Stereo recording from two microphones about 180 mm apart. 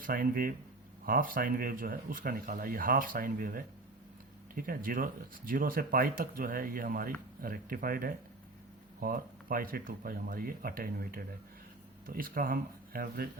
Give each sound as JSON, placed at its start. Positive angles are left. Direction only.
{"t": 0.0, "sound": "speech", "side_deg": -55}